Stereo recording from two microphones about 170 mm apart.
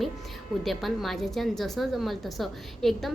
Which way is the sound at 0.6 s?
Centre (ahead or behind).